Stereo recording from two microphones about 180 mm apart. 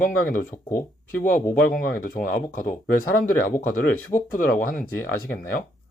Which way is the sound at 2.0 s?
50° left (ahead or behind).